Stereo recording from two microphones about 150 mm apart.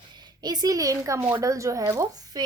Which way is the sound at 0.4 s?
25° right (ahead or behind).